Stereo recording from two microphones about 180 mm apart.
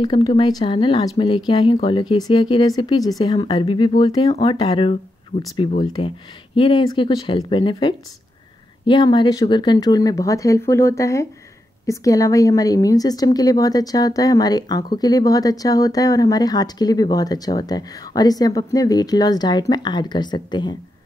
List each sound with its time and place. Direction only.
0.0 s a woman's voice: 25° left (ahead or behind)